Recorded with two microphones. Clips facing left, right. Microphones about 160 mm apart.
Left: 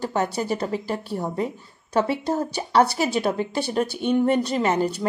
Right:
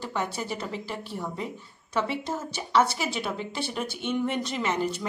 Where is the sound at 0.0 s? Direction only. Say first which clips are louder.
Left 7 dB; 40° left (ahead or behind).